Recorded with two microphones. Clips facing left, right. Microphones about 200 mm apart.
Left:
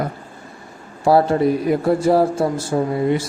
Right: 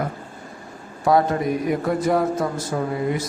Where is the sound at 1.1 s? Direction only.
30° left (ahead or behind).